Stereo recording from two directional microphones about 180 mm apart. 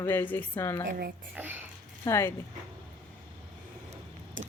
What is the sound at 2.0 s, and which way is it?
Speech, 15° left (ahead or behind).